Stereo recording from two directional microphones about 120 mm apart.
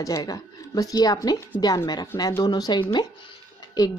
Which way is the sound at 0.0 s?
30° left (ahead or behind).